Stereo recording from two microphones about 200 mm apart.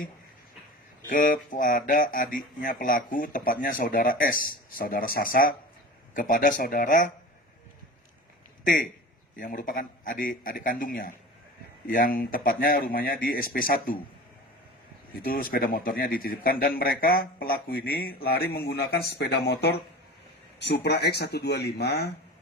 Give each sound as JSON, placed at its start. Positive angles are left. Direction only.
{"t": 1.0, "sound": "speech", "side_deg": 40}
{"t": 8.6, "sound": "a man's voice", "side_deg": 45}
{"t": 15.2, "sound": "speech", "side_deg": 45}